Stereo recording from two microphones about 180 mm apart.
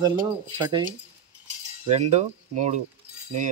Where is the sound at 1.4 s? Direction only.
40° right (ahead or behind).